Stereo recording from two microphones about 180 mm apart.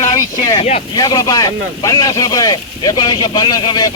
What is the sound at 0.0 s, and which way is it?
Vehicle, 20° left (ahead or behind).